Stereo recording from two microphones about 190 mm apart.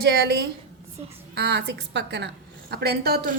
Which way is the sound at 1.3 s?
60° right (ahead or behind).